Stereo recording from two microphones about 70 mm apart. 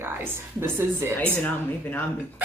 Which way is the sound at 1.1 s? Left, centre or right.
Left.